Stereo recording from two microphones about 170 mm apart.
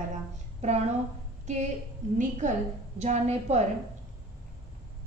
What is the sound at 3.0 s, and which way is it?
Speech, 40° right (ahead or behind).